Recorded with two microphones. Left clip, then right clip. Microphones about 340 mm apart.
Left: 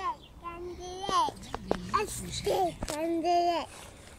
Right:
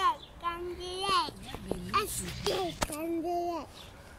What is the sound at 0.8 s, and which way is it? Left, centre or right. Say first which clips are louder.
Speech: left 1 dB; centre.